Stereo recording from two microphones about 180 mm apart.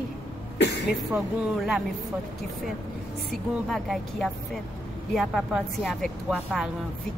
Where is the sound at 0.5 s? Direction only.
70° left (ahead or behind).